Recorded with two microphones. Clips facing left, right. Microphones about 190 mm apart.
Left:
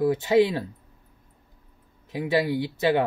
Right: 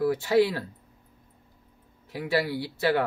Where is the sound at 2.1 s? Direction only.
20° left (ahead or behind).